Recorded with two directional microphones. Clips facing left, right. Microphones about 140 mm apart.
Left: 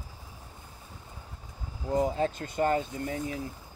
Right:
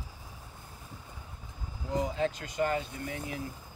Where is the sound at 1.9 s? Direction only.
45° left (ahead or behind).